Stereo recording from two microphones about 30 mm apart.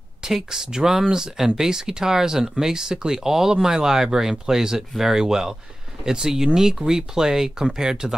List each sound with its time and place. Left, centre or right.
0.2 s speech: centre